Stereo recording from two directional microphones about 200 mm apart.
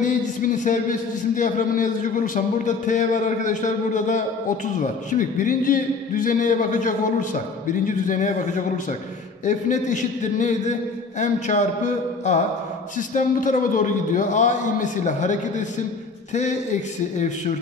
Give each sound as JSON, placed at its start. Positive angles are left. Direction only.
{"t": 0.0, "sound": "a man's voice", "side_deg": 40}
{"t": 9.5, "sound": "a man's voice", "side_deg": 35}